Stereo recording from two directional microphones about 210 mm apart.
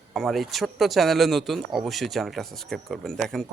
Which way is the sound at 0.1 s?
Centre (ahead or behind).